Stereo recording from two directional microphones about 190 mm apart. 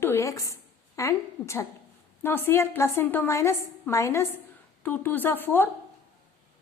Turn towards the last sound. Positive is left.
turn(degrees=10)  # may be behind; listen again after turning